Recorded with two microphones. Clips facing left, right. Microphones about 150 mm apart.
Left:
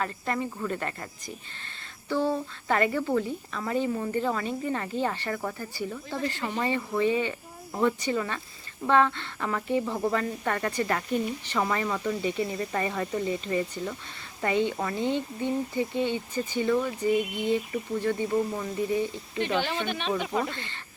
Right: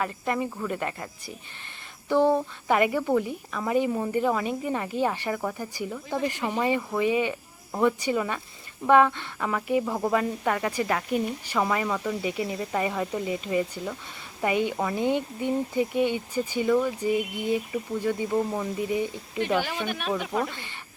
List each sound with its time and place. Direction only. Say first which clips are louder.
0.0 s speech: right 2 dB; 10° right (ahead or behind)
2.0 s speech: right 5 dB; 15° right (ahead or behind); by 20.5 s centre (ahead or behind)
20.5 s speech: left 3 dB; 15° right (ahead or behind)